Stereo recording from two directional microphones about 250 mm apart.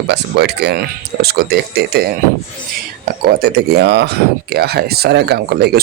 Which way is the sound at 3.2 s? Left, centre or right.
Right.